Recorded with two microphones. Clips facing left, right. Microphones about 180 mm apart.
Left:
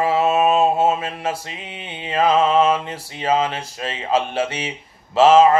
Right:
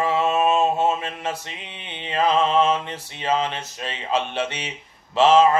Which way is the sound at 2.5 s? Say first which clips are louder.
Left 3 dB; 5° left (ahead or behind).